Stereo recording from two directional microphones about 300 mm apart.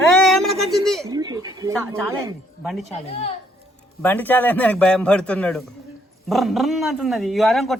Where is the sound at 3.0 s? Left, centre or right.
Centre.